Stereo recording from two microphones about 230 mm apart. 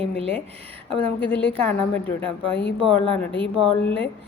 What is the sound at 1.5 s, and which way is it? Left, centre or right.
A woman's voice, centre.